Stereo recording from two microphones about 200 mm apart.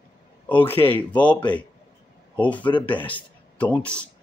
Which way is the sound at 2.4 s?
5° left (ahead or behind).